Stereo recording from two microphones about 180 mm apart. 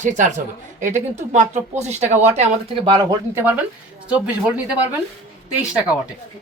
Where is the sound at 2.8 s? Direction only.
25° right (ahead or behind).